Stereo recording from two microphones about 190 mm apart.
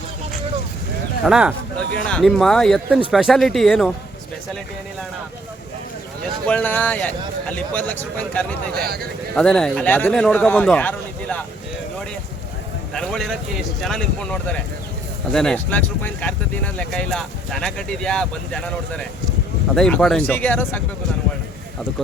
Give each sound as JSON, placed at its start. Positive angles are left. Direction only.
{"t": 1.2, "sound": "speech", "side_deg": -5}
{"t": 6.5, "sound": "speech", "side_deg": 10}
{"t": 8.7, "sound": "speech", "side_deg": -55}
{"t": 9.3, "sound": "speech", "side_deg": 5}
{"t": 12.9, "sound": "speech", "side_deg": 5}